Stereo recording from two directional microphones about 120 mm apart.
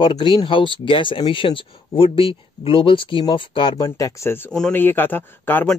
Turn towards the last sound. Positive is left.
turn(degrees=15)  # may be behind; listen again after turning